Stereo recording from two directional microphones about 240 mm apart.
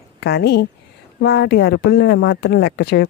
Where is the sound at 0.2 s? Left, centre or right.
Left.